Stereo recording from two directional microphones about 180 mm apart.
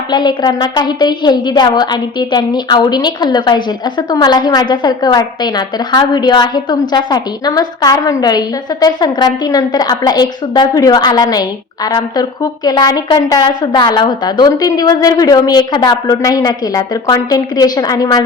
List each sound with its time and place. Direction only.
0.1 s a woman's voice: 25° left (ahead or behind)